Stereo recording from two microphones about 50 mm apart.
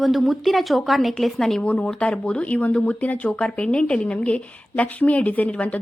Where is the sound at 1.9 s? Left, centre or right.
Centre.